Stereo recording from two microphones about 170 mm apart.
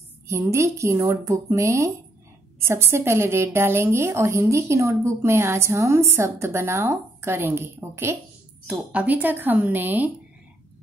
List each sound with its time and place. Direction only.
0.3 s a woman's voice: 15° right (ahead or behind)